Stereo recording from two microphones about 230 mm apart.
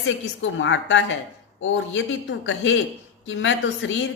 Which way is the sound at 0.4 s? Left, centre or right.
Left.